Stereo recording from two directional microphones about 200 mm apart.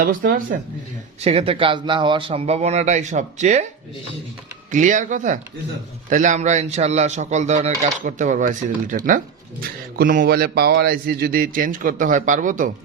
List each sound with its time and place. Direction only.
0.0 s speech: 45° right (ahead or behind)
1.2 s a man's voice: 30° right (ahead or behind)
4.7 s a man's voice: 40° right (ahead or behind)